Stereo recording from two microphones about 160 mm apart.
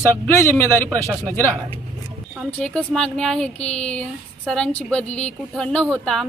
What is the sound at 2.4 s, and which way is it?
A woman's voice, centre (ahead or behind).